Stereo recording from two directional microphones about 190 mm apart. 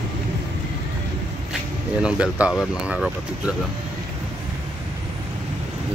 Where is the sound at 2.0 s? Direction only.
5° right (ahead or behind).